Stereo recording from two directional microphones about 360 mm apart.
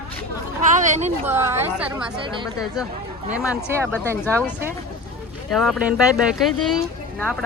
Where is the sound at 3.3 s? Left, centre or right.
Centre.